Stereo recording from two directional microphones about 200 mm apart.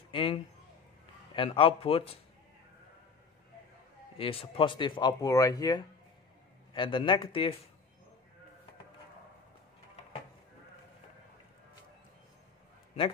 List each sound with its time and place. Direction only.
0.1 s a man's voice: 25° left (ahead or behind)
4.2 s speech: 25° left (ahead or behind)